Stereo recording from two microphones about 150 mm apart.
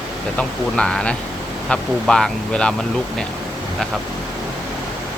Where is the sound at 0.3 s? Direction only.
5° left (ahead or behind).